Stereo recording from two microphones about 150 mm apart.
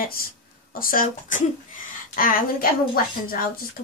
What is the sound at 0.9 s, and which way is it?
Speech, 60° left (ahead or behind).